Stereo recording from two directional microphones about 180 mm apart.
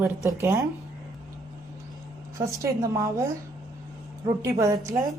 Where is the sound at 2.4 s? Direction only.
15° right (ahead or behind).